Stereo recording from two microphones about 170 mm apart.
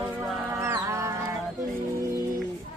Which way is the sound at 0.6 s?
15° right (ahead or behind).